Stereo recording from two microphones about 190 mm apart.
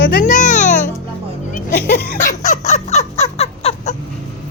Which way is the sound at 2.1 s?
45° left (ahead or behind).